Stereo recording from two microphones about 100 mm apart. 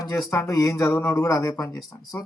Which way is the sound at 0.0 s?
30° left (ahead or behind).